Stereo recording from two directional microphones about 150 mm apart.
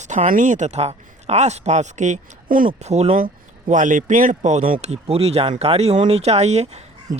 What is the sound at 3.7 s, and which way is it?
Speech, 60° right (ahead or behind).